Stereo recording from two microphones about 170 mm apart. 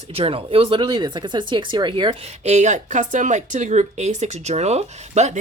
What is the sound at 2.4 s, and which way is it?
Speech, 45° right (ahead or behind).